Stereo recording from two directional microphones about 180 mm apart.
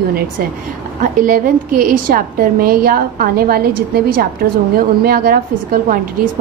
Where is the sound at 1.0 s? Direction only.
50° right (ahead or behind).